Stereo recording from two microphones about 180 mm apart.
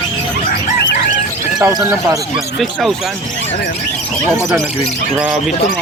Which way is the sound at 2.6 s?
Centre (ahead or behind).